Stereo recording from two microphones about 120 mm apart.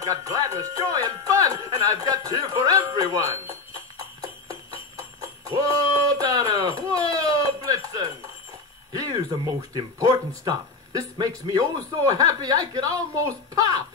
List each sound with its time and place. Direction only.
0.0 s speech: 30° right (ahead or behind)
5.5 s a sound: 30° right (ahead or behind)
8.9 s speech: 35° right (ahead or behind)